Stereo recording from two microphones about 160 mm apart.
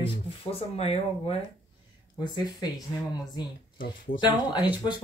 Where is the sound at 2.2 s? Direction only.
25° left (ahead or behind).